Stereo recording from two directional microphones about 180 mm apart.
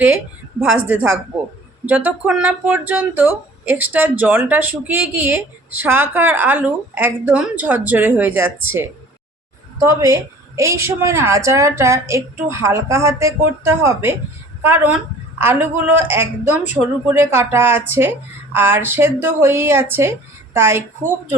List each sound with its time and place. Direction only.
0.9 s speech: 5° right (ahead or behind)